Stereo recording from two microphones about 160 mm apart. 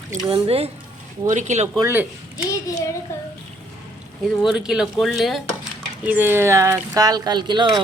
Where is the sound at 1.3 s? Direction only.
50° right (ahead or behind).